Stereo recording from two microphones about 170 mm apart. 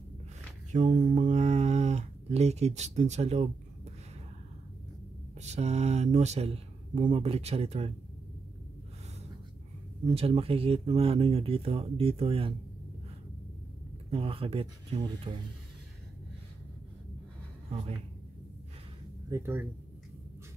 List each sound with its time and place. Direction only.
0.7 s speech: 45° right (ahead or behind)
5.4 s speech: 40° right (ahead or behind)
10.0 s speech: 35° right (ahead or behind)
14.1 s speech: 35° right (ahead or behind)
19.2 s speech: 15° right (ahead or behind)